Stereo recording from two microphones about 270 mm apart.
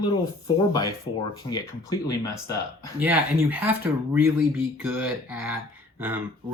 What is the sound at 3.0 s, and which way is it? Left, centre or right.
Speech, centre.